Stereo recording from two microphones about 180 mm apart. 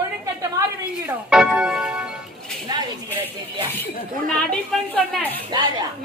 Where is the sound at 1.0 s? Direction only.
5° right (ahead or behind).